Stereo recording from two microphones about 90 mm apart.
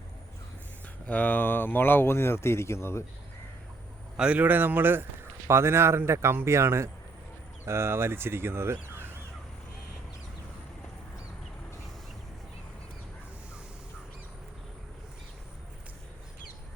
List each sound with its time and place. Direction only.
1.0 s speech: 15° left (ahead or behind)
4.2 s speech: 15° right (ahead or behind)